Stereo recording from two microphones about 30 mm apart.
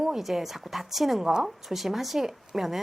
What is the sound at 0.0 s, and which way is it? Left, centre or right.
A woman's voice, centre.